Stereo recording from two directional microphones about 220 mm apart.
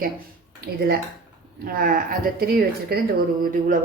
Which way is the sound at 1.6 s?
40° right (ahead or behind).